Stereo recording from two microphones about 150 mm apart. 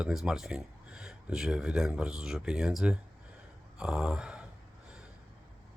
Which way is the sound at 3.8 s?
5° right (ahead or behind).